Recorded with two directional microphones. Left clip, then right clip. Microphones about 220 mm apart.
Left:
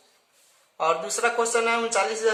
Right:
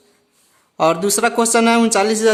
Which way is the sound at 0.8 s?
50° right (ahead or behind).